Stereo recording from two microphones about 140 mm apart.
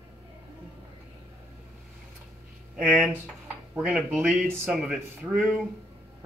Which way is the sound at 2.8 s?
5° right (ahead or behind).